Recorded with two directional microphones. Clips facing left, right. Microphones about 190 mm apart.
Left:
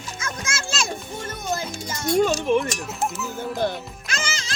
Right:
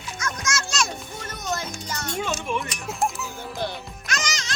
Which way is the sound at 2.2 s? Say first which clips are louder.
Left 9 dB; 40° left (ahead or behind).